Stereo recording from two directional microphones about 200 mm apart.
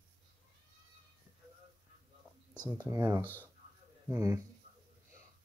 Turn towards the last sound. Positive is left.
turn(degrees=-15)  # may be behind; listen again after turning